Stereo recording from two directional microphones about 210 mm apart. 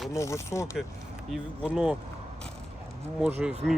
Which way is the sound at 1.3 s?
5° right (ahead or behind).